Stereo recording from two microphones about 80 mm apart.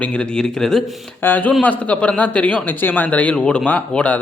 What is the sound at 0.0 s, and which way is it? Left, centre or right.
Speech, centre.